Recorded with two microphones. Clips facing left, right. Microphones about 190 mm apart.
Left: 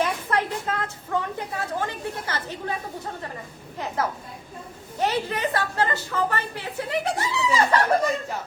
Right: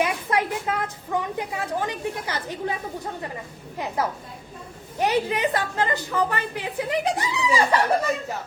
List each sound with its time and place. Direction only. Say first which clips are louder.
0.0 s a woman's voice: right 1 dB; 10° right (ahead or behind)
3.8 s a woman's voice: right 1 dB; 15° right (ahead or behind)